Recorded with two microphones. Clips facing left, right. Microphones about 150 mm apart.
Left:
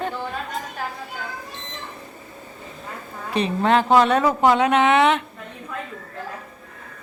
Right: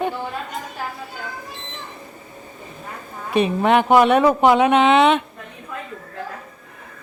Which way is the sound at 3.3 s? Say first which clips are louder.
Right 3 dB; 15° right (ahead or behind).